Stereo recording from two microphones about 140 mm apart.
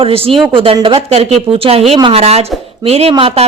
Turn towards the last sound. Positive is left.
turn(degrees=-45)  # may be behind; listen again after turning